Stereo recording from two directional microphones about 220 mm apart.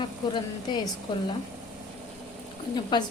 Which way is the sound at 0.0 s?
20° left (ahead or behind).